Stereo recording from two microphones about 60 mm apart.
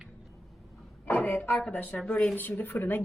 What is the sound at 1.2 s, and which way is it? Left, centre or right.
A woman's voice, left.